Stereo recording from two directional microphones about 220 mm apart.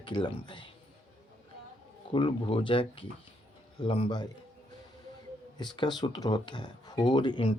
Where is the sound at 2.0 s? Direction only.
25° left (ahead or behind).